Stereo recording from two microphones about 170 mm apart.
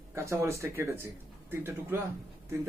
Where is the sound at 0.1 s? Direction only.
15° right (ahead or behind).